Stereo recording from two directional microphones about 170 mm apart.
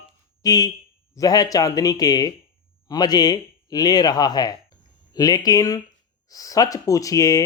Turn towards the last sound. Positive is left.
turn(degrees=20)  # may be behind; listen again after turning